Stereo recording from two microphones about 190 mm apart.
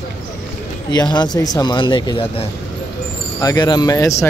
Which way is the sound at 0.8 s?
25° left (ahead or behind).